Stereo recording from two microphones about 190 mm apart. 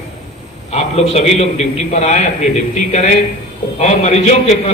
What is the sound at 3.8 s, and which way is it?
Speech, 35° left (ahead or behind).